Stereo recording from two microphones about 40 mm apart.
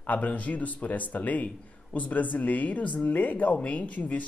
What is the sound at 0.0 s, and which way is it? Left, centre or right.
Speech, left.